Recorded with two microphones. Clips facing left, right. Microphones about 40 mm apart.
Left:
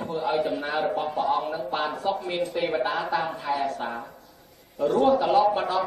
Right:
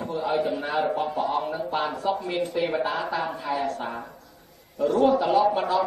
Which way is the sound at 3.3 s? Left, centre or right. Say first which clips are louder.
Even; centre.